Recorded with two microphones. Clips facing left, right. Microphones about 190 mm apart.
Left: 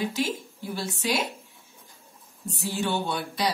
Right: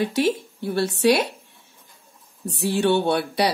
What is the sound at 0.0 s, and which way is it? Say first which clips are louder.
Speech: right 7 dB; 65° right (ahead or behind).